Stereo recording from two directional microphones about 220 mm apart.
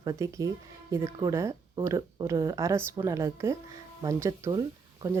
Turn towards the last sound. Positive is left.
turn(degrees=-15)  # may be behind; listen again after turning